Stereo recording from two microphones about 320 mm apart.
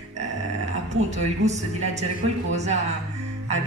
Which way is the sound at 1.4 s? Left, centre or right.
Right.